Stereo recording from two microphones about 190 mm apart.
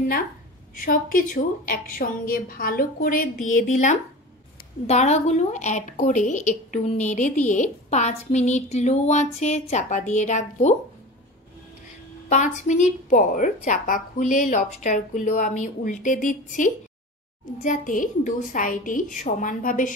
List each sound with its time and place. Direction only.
0.8 s a woman's voice: 45° left (ahead or behind)
12.3 s a woman's voice: 40° left (ahead or behind)